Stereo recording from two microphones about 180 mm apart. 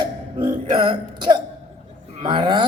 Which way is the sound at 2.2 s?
25° right (ahead or behind).